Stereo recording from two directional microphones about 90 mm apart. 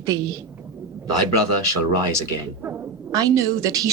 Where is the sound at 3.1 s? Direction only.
35° right (ahead or behind).